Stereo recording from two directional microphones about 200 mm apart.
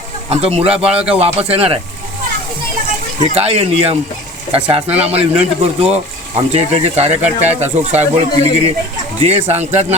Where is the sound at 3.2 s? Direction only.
30° right (ahead or behind).